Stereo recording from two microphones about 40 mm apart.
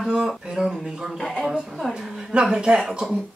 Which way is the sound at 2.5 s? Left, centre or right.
Right.